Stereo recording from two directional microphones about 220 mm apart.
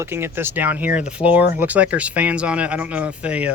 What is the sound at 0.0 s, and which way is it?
Speech, 10° right (ahead or behind).